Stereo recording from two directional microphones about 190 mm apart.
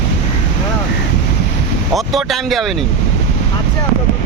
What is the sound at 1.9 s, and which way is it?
Speech, centre (ahead or behind).